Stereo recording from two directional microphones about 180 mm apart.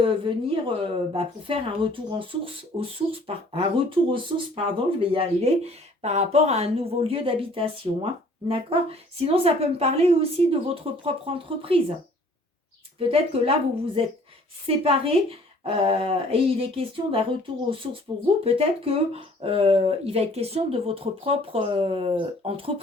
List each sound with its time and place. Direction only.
0.0 s a woman's voice: 30° right (ahead or behind)
13.0 s speech: 30° right (ahead or behind)
14.7 s speech: 30° right (ahead or behind)